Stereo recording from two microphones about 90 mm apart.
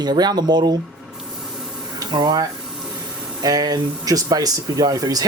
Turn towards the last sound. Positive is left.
turn(degrees=-45)  # may be behind; listen again after turning